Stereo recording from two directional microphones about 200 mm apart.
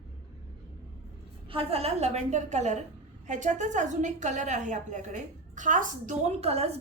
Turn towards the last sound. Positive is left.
turn(degrees=-30)  # may be behind; listen again after turning